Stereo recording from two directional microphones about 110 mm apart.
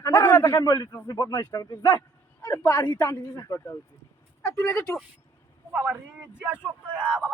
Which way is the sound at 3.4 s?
25° left (ahead or behind).